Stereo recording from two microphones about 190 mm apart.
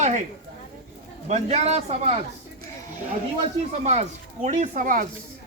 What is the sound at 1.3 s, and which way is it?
Speech, 35° right (ahead or behind).